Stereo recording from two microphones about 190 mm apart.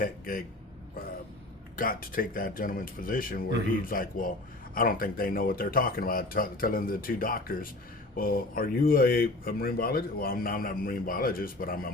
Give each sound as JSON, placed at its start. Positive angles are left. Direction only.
{"t": 0.0, "sound": "a man's voice", "side_deg": 50}
{"t": 1.7, "sound": "speech", "side_deg": 50}